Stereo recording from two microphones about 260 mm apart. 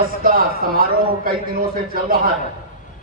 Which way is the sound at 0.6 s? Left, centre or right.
Right.